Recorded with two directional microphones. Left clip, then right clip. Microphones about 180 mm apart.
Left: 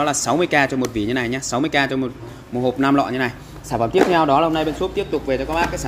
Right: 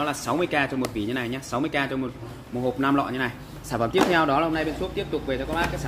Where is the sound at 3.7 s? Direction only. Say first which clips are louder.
Left 5 dB; 15° left (ahead or behind).